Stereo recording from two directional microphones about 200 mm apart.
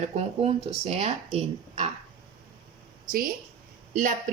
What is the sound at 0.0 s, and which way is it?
Speech, 30° right (ahead or behind).